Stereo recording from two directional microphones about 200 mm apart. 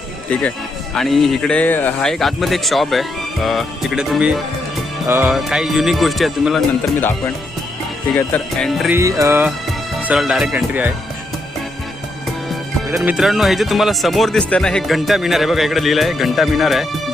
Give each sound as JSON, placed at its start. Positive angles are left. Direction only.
{"t": 0.9, "sound": "speech", "side_deg": 0}
{"t": 5.0, "sound": "music", "side_deg": -10}
{"t": 5.3, "sound": "speech", "side_deg": 0}
{"t": 8.9, "sound": "music", "side_deg": -15}
{"t": 10.0, "sound": "speech", "side_deg": -5}
{"t": 13.0, "sound": "speech", "side_deg": -5}